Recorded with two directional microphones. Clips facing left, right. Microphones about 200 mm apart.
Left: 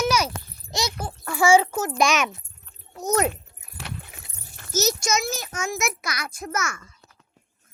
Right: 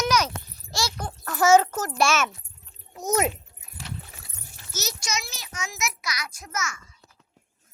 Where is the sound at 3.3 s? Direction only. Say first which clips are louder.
Left 1 dB; 65° left (ahead or behind).